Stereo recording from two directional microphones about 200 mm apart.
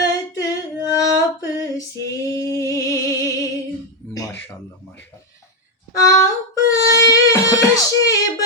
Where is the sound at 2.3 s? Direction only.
15° left (ahead or behind).